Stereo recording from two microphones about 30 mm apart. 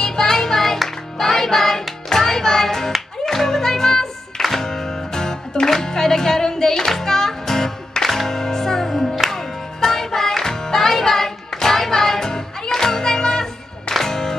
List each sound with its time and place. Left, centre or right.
0.0 s music: centre
5.7 s speech: centre
6.9 s music: centre